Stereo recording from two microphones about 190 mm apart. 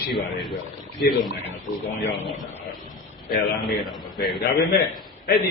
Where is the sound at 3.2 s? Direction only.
55° left (ahead or behind).